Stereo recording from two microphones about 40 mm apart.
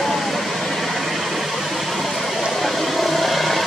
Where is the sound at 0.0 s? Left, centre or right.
Centre.